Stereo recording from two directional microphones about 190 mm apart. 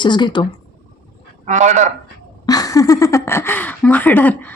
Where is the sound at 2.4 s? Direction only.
20° left (ahead or behind).